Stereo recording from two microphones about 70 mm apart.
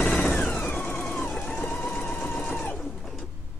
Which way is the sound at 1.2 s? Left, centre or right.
Left.